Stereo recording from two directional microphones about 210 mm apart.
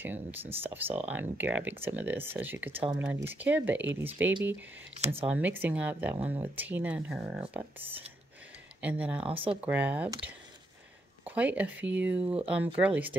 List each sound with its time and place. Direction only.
0.0 s speech: 10° right (ahead or behind)
4.9 s speech: 30° right (ahead or behind)
5.2 s speech: 5° right (ahead or behind)
8.8 s speech: 5° right (ahead or behind)
9.2 s speech: 25° right (ahead or behind)
9.6 s speech: 5° right (ahead or behind)
11.2 s speech: 5° right (ahead or behind)